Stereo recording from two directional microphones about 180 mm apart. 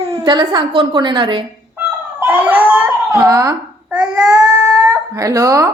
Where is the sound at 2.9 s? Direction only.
15° right (ahead or behind).